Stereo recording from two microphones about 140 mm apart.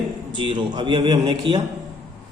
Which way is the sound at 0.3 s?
35° right (ahead or behind).